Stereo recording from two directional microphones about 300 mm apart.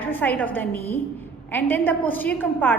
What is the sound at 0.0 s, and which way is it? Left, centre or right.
A woman's voice, centre.